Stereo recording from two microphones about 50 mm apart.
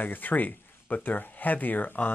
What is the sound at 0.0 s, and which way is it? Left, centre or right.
Speech, left.